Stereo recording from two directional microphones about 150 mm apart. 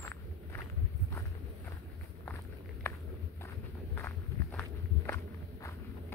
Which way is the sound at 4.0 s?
15° left (ahead or behind).